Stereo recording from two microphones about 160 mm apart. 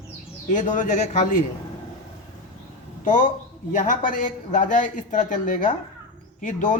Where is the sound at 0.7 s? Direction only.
50° left (ahead or behind).